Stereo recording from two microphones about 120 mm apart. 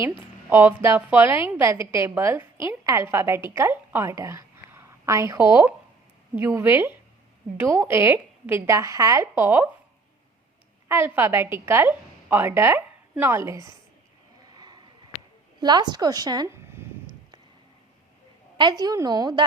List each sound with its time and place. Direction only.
0.5 s a woman's voice: 20° right (ahead or behind)
10.8 s a woman's voice: 20° right (ahead or behind)
14.5 s a sound: 35° right (ahead or behind)
15.6 s a woman's voice: 35° right (ahead or behind)
18.5 s a woman's voice: 35° right (ahead or behind)